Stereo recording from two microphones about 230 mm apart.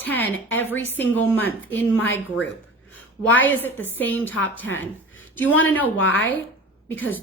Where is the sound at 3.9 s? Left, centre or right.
Centre.